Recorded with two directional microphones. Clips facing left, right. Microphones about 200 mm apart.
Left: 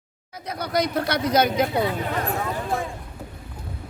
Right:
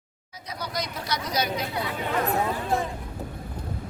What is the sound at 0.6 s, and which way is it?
Speech, 60° left (ahead or behind).